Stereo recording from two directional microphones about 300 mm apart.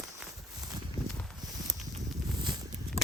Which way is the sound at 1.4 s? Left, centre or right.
Centre.